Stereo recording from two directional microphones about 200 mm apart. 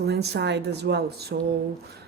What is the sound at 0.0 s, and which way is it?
A woman's voice, 55° right (ahead or behind).